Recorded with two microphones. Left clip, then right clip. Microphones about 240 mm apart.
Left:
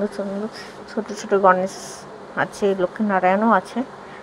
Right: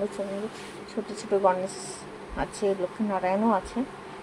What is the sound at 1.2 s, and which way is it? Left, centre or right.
Speech, centre.